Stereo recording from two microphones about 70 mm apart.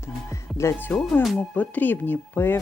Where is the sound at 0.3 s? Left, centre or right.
Left.